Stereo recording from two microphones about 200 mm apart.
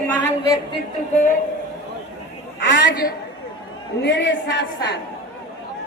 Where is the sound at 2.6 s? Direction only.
60° left (ahead or behind).